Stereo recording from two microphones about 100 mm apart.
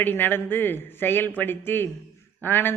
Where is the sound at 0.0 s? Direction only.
20° left (ahead or behind).